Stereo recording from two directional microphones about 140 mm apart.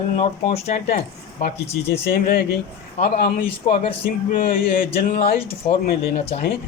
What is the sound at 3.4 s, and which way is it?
Speech, 40° left (ahead or behind).